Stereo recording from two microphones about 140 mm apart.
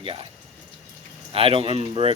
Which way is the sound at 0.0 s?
40° right (ahead or behind).